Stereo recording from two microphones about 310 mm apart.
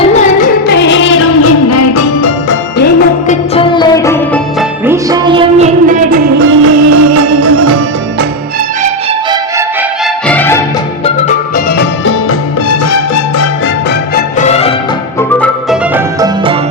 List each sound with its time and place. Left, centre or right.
0.1 s music: left
2.7 s music: left
3.5 s music: centre
4.9 s music: centre
6.4 s music: right
10.2 s music: centre
11.5 s music: left
14.2 s music: left